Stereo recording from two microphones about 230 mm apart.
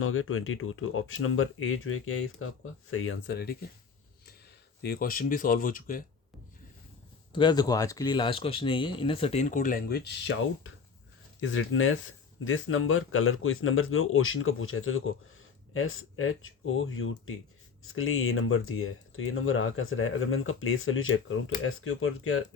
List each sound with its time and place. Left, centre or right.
0.0 s speech: left
3.3 s speech: left
4.8 s speech: left
7.3 s speech: centre; by 22.4 s left